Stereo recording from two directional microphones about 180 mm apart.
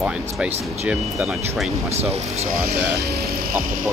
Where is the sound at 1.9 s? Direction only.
35° right (ahead or behind).